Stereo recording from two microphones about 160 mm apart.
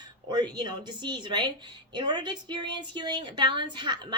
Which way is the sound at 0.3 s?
25° right (ahead or behind).